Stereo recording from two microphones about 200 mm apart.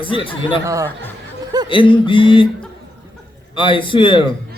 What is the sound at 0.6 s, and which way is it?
Speech, 15° right (ahead or behind).